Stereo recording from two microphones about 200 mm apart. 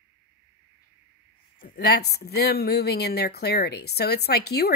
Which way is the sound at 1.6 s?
55° left (ahead or behind).